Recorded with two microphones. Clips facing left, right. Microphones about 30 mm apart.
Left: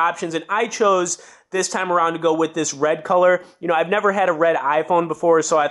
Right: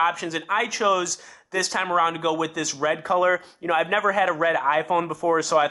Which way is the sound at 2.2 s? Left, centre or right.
Right.